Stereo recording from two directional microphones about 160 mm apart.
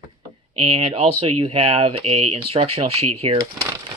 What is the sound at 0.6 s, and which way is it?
Speech, 35° right (ahead or behind).